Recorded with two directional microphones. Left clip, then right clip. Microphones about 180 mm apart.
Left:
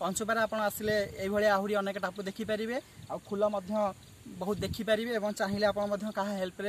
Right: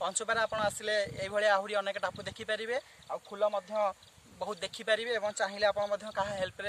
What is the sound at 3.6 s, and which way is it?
A man's voice, 30° right (ahead or behind).